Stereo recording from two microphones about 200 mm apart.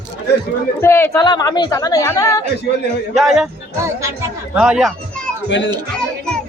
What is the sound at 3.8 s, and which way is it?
Speech, 15° right (ahead or behind).